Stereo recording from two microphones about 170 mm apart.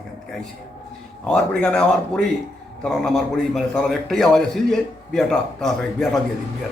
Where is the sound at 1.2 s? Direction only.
5° left (ahead or behind).